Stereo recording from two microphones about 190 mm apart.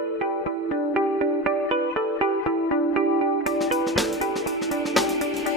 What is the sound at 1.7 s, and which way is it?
Music, 25° right (ahead or behind).